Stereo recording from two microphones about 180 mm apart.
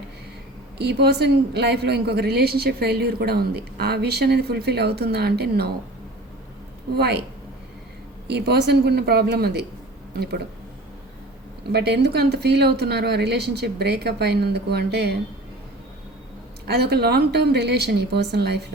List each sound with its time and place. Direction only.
0.8 s a woman's voice: 65° right (ahead or behind)
6.9 s a woman's voice: 65° right (ahead or behind)
8.3 s a woman's voice: 65° right (ahead or behind)
11.7 s a woman's voice: 65° right (ahead or behind)
16.6 s a woman's voice: 65° right (ahead or behind)